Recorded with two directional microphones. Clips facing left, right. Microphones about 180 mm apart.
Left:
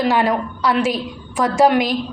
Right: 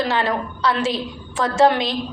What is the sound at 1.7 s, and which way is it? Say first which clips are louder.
Speech: left 5 dB; 25° right (ahead or behind).